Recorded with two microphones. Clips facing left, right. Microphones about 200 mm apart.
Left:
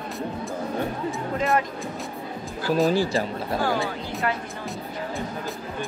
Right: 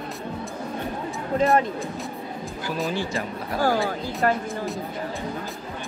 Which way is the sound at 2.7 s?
35° left (ahead or behind).